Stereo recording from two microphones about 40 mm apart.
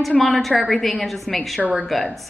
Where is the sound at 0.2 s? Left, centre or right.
Centre.